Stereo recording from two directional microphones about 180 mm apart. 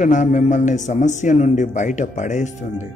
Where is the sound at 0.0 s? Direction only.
45° left (ahead or behind).